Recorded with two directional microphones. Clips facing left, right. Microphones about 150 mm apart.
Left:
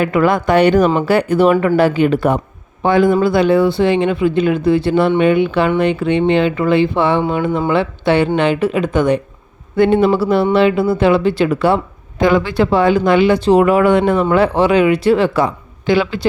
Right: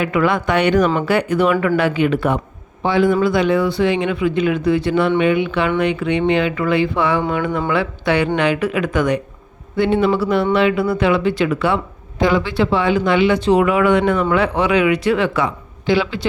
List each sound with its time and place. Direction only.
0.0 s speech: 40° left (ahead or behind)
9.7 s speech: 45° left (ahead or behind)
12.2 s speech: 50° left (ahead or behind)
15.9 s speech: 45° left (ahead or behind)